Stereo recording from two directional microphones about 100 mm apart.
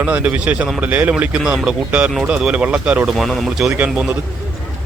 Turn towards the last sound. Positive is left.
turn(degrees=-10)  # may be behind; listen again after turning